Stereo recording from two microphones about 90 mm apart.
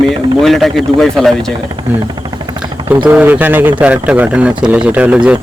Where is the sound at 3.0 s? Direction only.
15° right (ahead or behind).